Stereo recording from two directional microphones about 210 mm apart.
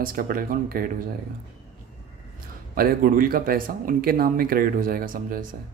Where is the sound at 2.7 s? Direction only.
40° right (ahead or behind).